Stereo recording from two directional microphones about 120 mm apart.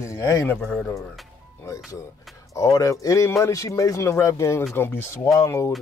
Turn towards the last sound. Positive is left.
turn(degrees=20)  # may be behind; listen again after turning